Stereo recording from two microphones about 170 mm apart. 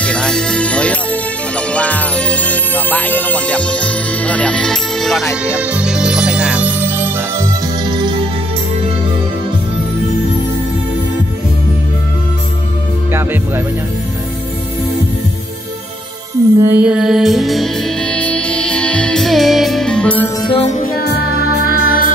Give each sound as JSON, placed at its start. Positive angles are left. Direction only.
{"t": 0.0, "sound": "music", "side_deg": 5}
{"t": 7.8, "sound": "music", "side_deg": -25}
{"t": 16.5, "sound": "music", "side_deg": -10}
{"t": 20.4, "sound": "music", "side_deg": 35}